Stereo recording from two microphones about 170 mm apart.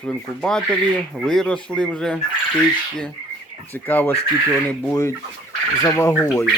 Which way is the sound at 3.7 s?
10° left (ahead or behind).